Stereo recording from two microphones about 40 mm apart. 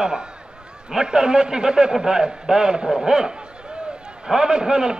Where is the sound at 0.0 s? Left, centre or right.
Centre.